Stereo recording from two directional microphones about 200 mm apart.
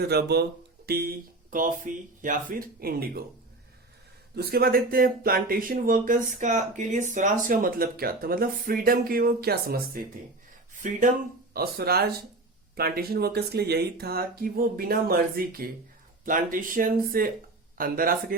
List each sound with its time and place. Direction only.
0.1 s speech: 55° right (ahead or behind)
4.4 s speech: 50° right (ahead or behind)
11.5 s speech: 50° right (ahead or behind)